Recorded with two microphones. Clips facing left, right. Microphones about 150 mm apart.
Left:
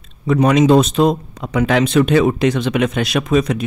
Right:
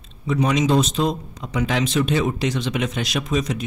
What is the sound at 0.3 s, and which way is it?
A man's voice, 60° left (ahead or behind).